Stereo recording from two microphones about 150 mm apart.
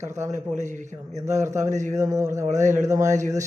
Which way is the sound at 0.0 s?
50° right (ahead or behind).